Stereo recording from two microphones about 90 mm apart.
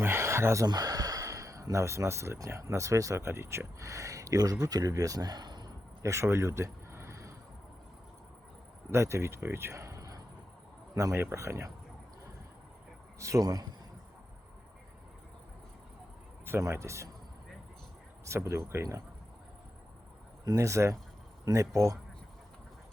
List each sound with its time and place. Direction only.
0.0 s a sound: 30° right (ahead or behind)
0.7 s speech: 45° right (ahead or behind)
6.0 s a sound: 35° right (ahead or behind)
8.9 s speech: 30° right (ahead or behind)
13.1 s speech: 35° right (ahead or behind)
16.5 s speech: 30° right (ahead or behind)
18.3 s speech: 30° right (ahead or behind)
20.4 s speech: 40° right (ahead or behind)